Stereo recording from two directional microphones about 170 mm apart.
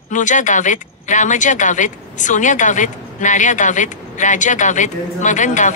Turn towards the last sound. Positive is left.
turn(degrees=45)  # may be behind; listen again after turning